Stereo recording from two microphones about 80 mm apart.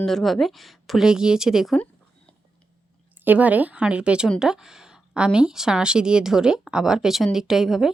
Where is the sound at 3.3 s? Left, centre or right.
Centre.